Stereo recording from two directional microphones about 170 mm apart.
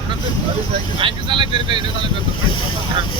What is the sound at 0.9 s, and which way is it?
Speech, 30° right (ahead or behind).